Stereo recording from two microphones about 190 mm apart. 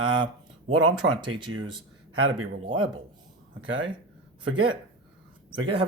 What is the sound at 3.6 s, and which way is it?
Speech, 75° right (ahead or behind).